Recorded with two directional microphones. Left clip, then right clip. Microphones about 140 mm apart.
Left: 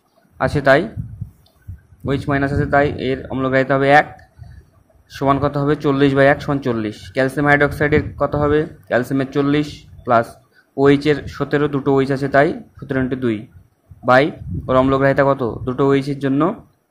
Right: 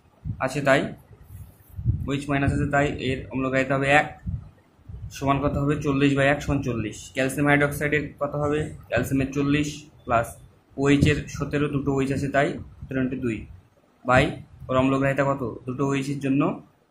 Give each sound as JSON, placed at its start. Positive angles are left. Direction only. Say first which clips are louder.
{"t": 0.4, "sound": "speech", "louder": "left 7 dB", "side_deg": 50}
{"t": 2.0, "sound": "speech", "louder": "left 7 dB", "side_deg": 45}
{"t": 5.2, "sound": "speech", "louder": "left 7 dB", "side_deg": 45}